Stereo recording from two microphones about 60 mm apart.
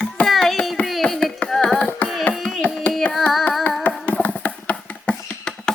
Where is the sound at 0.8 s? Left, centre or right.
Centre.